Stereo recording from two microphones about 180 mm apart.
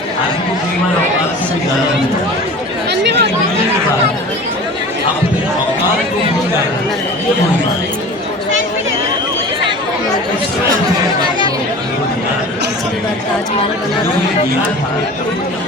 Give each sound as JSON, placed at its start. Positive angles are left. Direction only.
{"t": 2.9, "sound": "chatter", "side_deg": -70}